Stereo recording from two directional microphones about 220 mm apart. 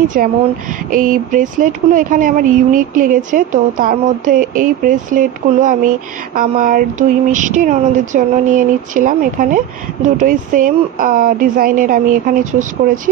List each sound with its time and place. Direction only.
0.2 s speech: 40° right (ahead or behind)